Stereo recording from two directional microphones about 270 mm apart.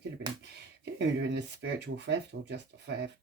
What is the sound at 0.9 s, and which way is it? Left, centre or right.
Speech, right.